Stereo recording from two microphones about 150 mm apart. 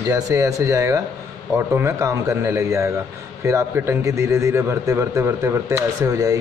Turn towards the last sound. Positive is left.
turn(degrees=-20)  # may be behind; listen again after turning